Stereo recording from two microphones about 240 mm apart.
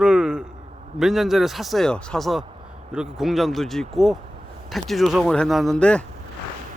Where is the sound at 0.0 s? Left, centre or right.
Centre.